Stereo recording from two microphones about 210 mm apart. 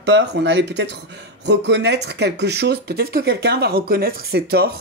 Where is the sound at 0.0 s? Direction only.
55° right (ahead or behind).